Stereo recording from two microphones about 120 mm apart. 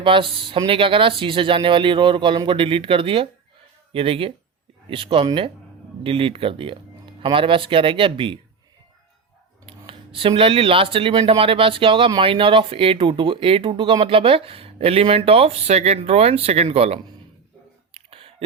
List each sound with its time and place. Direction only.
0.0 s speech: 45° right (ahead or behind)
9.6 s speech: 50° right (ahead or behind)
17.9 s a sound: 55° right (ahead or behind)